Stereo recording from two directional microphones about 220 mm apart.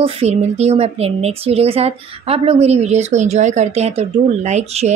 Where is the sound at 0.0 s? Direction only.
30° right (ahead or behind).